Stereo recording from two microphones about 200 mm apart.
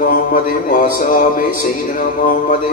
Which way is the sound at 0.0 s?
45° left (ahead or behind).